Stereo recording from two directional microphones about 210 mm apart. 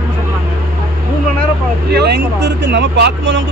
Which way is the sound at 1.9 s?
50° right (ahead or behind).